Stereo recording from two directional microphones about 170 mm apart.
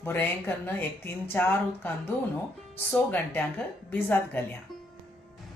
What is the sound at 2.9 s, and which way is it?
Speech, 10° left (ahead or behind).